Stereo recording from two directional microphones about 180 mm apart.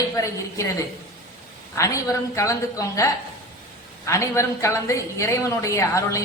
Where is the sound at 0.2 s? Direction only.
15° left (ahead or behind).